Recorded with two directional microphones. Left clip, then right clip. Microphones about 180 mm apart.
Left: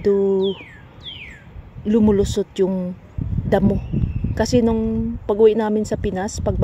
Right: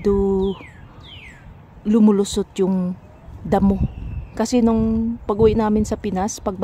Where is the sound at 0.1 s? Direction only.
25° right (ahead or behind).